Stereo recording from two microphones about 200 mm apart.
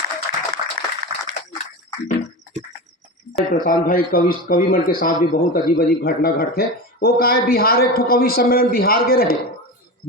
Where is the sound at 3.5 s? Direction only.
45° left (ahead or behind).